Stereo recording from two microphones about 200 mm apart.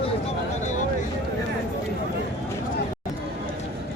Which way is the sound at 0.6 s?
35° left (ahead or behind).